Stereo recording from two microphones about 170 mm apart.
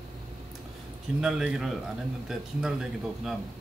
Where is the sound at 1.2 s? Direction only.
5° right (ahead or behind).